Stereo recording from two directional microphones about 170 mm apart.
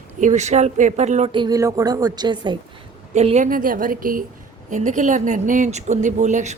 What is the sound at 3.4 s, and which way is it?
A woman's voice, 55° right (ahead or behind).